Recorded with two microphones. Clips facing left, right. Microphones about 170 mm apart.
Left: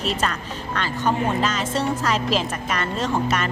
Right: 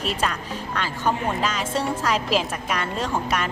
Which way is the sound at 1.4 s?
10° right (ahead or behind).